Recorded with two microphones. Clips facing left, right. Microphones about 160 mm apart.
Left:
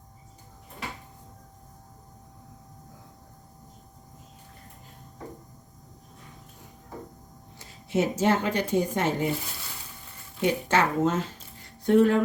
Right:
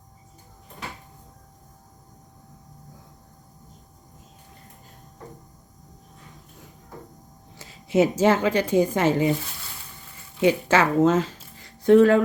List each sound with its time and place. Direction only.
7.6 s a woman's voice: 90° right
10.4 s speech: 90° right
11.6 s a sound: 90° right